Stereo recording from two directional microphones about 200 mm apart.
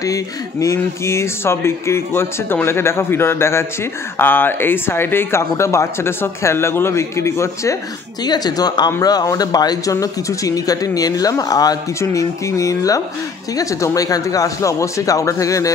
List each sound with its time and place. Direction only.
0.0 s speech: 15° left (ahead or behind)